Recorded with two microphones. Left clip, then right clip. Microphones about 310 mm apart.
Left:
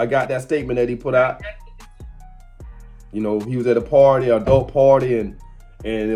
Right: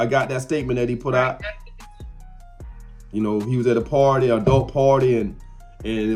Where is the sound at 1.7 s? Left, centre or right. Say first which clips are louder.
Right 1 dB; centre.